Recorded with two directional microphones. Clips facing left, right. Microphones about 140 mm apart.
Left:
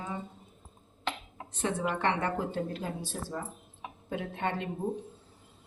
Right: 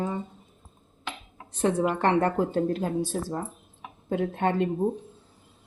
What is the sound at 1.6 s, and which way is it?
A woman's voice, 40° right (ahead or behind).